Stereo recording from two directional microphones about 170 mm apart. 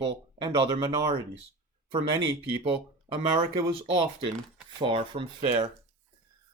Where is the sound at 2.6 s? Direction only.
30° right (ahead or behind).